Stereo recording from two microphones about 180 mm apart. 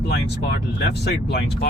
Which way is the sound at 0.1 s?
65° left (ahead or behind).